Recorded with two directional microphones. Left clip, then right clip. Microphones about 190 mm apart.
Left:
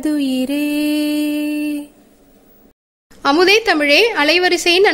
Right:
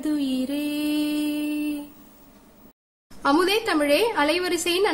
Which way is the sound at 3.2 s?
25° left (ahead or behind).